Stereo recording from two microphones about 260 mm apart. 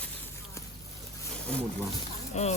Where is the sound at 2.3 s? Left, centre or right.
Left.